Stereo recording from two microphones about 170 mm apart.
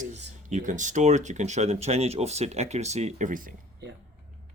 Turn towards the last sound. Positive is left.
turn(degrees=-55)  # may be behind; listen again after turning